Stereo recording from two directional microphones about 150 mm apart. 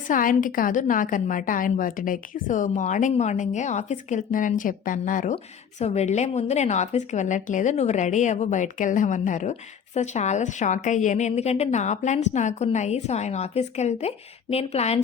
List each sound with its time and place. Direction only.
0.1 s a woman's voice: 65° left (ahead or behind)
5.8 s a woman's voice: 45° left (ahead or behind)